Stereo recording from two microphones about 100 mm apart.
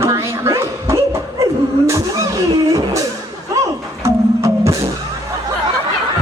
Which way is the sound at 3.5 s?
30° right (ahead or behind).